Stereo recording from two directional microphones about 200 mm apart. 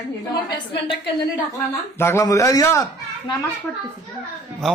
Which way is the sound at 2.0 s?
15° left (ahead or behind).